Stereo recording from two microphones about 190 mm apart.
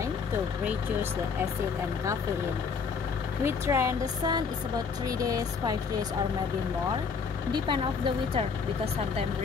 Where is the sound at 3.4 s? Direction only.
15° right (ahead or behind).